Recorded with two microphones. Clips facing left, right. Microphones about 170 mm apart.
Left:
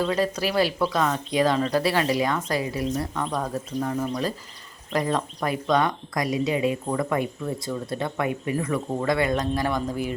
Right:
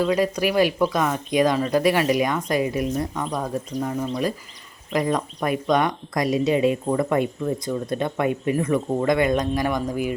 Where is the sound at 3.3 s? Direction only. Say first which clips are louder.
Right 2 dB; 5° right (ahead or behind).